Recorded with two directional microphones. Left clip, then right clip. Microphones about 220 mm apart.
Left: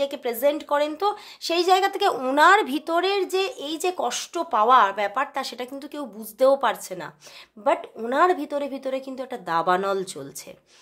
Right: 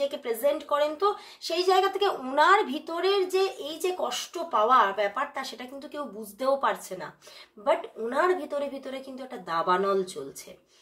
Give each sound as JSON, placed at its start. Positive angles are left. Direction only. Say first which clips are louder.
{"t": 0.0, "sound": "speech", "louder": "left 4 dB", "side_deg": 50}